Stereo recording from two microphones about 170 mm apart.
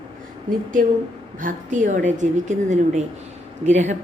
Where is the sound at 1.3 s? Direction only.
50° right (ahead or behind).